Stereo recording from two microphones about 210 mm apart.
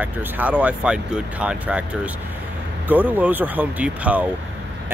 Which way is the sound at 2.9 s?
10° right (ahead or behind).